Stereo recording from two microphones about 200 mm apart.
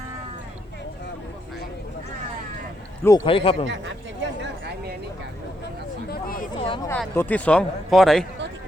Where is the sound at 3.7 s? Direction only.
60° right (ahead or behind).